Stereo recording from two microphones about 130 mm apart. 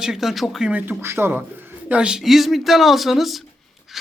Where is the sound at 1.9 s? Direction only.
5° right (ahead or behind).